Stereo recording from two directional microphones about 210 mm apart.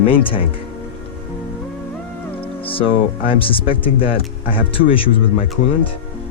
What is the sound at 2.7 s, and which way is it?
Speech, 25° left (ahead or behind).